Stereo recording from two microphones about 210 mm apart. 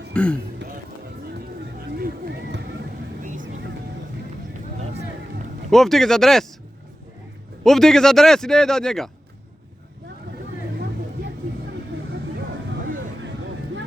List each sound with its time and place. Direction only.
0.1 s speech: 5° left (ahead or behind)
2.0 s a sound: 50° right (ahead or behind)
3.2 s vehicle: 35° right (ahead or behind)
5.7 s a man's voice: centre (ahead or behind)
7.6 s a man's voice: centre (ahead or behind)